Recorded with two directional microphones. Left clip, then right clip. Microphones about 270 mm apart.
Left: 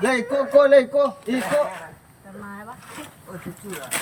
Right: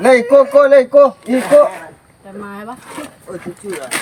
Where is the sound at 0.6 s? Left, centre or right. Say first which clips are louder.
Right 7 dB; centre.